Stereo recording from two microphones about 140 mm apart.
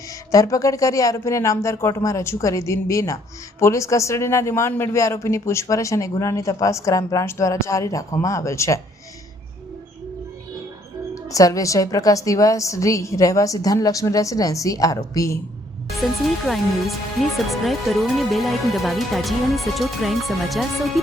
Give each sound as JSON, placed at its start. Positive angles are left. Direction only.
{"t": 0.1, "sound": "a woman's voice", "side_deg": 25}
{"t": 11.1, "sound": "a woman's voice", "side_deg": 25}
{"t": 15.9, "sound": "speech", "side_deg": 0}